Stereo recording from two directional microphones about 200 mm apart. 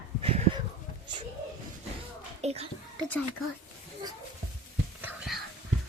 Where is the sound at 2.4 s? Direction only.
30° right (ahead or behind).